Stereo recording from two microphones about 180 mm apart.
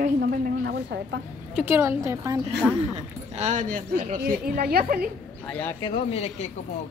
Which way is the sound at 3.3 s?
45° right (ahead or behind).